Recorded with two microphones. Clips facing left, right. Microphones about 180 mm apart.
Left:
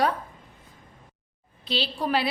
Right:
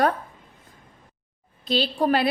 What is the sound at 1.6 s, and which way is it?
Speech, 45° right (ahead or behind).